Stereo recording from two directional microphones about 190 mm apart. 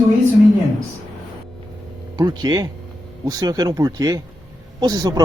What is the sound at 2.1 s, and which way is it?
Speech, 20° right (ahead or behind).